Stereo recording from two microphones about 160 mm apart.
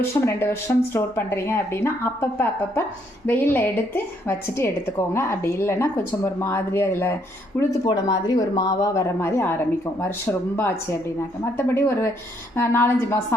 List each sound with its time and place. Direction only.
0.0 s a woman's voice: 15° left (ahead or behind)
3.2 s a woman's voice: 15° left (ahead or behind)
7.9 s a woman's voice: 25° left (ahead or behind)